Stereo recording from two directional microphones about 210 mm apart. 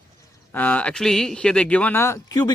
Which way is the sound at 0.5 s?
5° left (ahead or behind).